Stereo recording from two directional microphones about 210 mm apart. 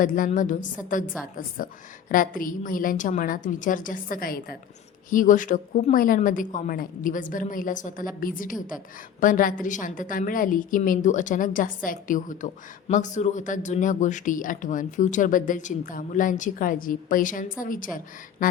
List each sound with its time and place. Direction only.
0.0 s speech: 40° left (ahead or behind)